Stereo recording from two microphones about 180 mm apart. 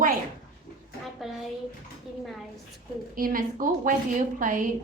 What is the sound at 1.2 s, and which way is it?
Bathtub, centre (ahead or behind).